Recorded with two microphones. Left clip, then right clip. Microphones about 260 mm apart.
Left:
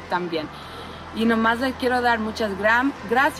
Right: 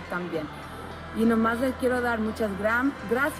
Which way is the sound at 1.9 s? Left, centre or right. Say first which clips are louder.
Left 6 dB; left.